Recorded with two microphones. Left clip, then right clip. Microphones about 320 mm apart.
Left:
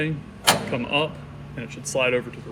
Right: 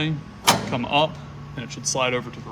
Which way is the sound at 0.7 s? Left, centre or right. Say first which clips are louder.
Right 3 dB; centre.